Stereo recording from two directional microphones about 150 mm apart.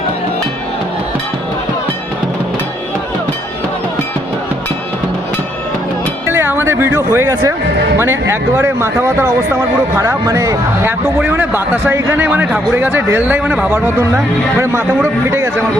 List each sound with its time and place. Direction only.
6.2 s a man's voice: 15° right (ahead or behind)